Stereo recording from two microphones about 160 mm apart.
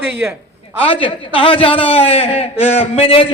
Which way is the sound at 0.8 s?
35° left (ahead or behind).